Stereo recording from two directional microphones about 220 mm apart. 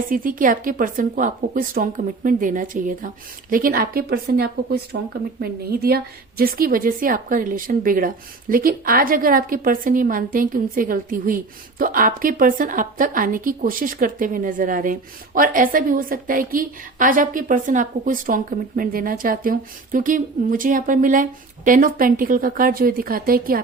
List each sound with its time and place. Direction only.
0.1 s a woman's voice: 40° right (ahead or behind)